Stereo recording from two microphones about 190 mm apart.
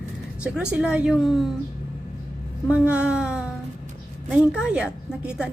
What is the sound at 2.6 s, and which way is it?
A woman's voice, 5° right (ahead or behind).